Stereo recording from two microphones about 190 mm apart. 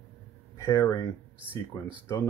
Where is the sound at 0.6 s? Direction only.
15° left (ahead or behind).